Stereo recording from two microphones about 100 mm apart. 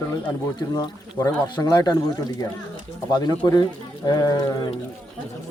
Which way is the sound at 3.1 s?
45° left (ahead or behind).